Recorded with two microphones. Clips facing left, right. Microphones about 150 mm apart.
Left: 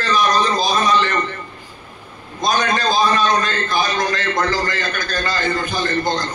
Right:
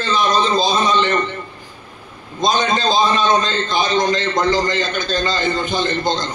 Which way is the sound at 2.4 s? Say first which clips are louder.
Right 1 dB; 20° right (ahead or behind).